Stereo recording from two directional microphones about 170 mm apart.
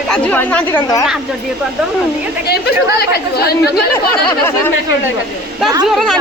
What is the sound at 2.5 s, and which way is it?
Speech, 70° left (ahead or behind).